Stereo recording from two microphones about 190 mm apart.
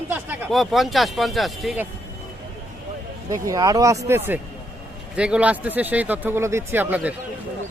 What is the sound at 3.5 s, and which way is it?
Speech, 20° right (ahead or behind).